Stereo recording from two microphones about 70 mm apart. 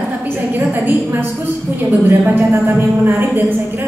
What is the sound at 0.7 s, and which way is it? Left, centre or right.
A woman's voice, right.